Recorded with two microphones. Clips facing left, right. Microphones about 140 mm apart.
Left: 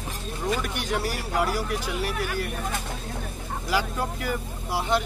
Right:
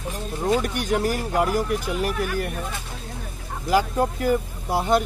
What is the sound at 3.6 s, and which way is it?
Speech, 45° right (ahead or behind).